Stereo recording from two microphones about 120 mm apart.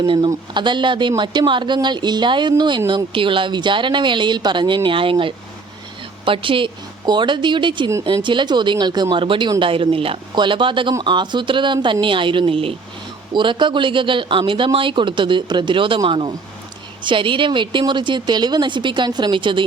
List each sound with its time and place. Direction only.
0.0 s speech: 40° right (ahead or behind)